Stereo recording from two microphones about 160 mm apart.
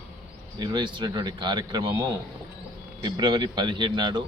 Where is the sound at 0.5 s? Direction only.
25° right (ahead or behind).